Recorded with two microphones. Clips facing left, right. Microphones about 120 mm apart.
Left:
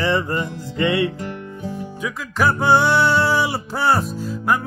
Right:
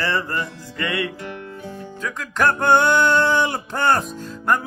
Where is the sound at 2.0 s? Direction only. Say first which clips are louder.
Even; 5° left (ahead or behind).